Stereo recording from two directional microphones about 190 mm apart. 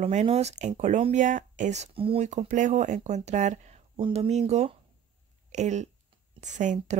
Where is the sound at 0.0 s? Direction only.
35° right (ahead or behind).